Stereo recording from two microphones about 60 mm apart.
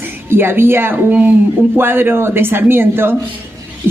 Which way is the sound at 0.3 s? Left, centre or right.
Right.